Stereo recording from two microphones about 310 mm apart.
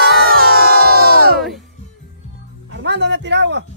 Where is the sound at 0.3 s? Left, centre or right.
Right.